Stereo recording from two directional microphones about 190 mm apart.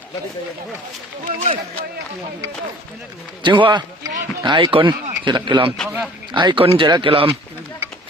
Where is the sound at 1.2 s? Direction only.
25° right (ahead or behind).